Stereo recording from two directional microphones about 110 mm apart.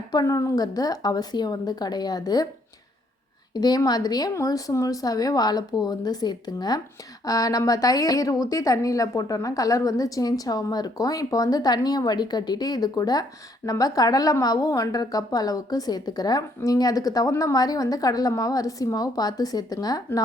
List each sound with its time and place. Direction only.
0.1 s a woman's voice: 30° left (ahead or behind)
3.5 s a woman's voice: 40° left (ahead or behind)